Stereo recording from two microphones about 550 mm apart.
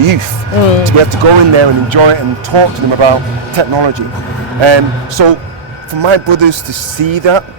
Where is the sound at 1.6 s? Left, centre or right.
Right.